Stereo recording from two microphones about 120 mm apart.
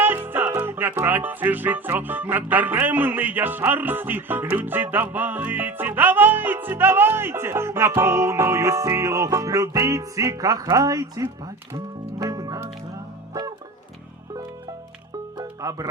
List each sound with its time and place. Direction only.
0.0 s music: 15° right (ahead or behind)
15.4 s music: 30° right (ahead or behind)